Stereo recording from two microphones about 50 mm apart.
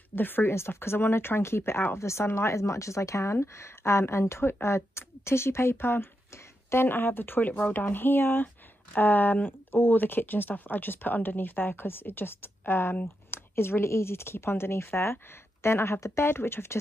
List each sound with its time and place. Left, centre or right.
0.1 s speech: left
2.0 s speech: left
3.3 s speech: left